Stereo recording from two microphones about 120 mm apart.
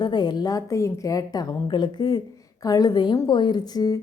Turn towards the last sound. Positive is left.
turn(degrees=30)  # may be behind; listen again after turning